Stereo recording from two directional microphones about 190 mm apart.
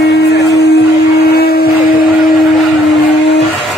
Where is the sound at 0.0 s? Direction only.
60° left (ahead or behind).